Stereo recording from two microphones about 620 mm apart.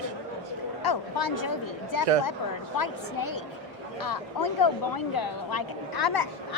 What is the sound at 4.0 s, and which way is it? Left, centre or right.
Speech, left.